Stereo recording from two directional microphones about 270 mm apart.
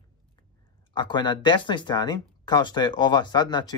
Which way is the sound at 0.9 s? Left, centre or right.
Centre.